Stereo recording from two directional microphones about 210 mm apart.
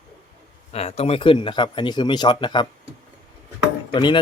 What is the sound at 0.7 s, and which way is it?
Speech, 30° left (ahead or behind).